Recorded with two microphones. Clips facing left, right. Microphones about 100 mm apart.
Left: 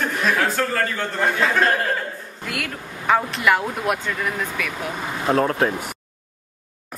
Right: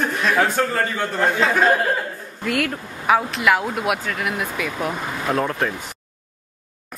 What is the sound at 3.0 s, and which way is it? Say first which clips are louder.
Speech: right 1 dB; 5° right (ahead or behind).